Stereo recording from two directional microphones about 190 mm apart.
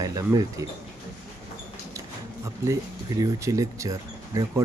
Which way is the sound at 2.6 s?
15° right (ahead or behind).